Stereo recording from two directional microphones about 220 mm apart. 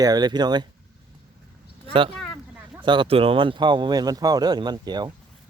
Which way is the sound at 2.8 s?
20° right (ahead or behind).